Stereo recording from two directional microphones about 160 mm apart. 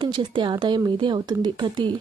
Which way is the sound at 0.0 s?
30° right (ahead or behind).